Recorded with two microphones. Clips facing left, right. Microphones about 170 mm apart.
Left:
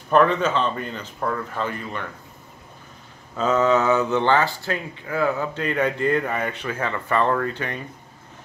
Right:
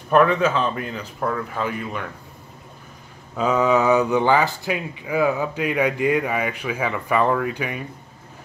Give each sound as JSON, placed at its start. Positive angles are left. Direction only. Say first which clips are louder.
{"t": 0.1, "sound": "speech", "louder": "right 1 dB", "side_deg": -5}
{"t": 3.3, "sound": "speech", "louder": "right 1 dB", "side_deg": -10}